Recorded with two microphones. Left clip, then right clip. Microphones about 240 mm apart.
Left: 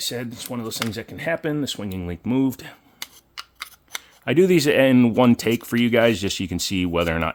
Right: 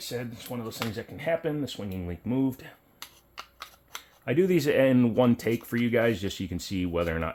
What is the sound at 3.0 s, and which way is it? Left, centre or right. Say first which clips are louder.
Scissors: left 7 dB; left.